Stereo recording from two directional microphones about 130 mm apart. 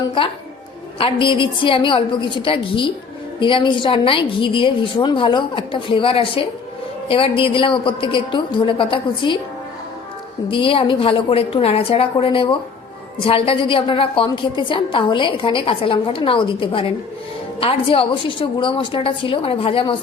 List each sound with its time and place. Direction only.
0.2 s a woman's voice: 40° left (ahead or behind)
10.5 s a woman's voice: 40° left (ahead or behind)